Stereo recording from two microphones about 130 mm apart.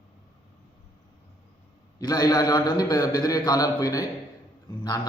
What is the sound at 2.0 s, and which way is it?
A man's voice, 30° left (ahead or behind).